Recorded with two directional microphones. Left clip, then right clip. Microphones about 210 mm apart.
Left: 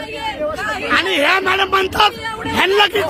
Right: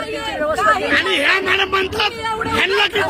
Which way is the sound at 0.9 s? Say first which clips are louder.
Left 1 dB; 25° left (ahead or behind).